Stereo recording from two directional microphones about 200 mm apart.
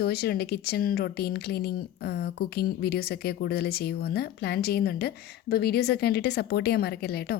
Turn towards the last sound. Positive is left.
turn(degrees=50)  # may be behind; listen again after turning